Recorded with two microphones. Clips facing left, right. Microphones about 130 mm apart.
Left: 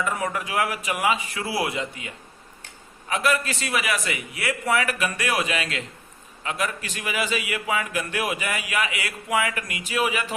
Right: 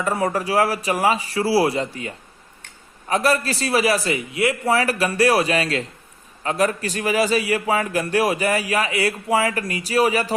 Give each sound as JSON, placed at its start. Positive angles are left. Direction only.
{"t": 0.0, "sound": "a man's voice", "side_deg": -35}